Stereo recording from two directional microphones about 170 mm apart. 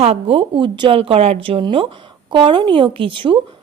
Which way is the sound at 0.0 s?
35° right (ahead or behind).